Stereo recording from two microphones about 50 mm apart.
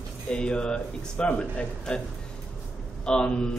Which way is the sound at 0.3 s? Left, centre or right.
Centre.